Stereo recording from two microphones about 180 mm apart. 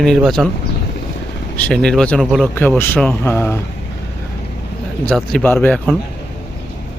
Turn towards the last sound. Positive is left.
turn(degrees=10)  # may be behind; listen again after turning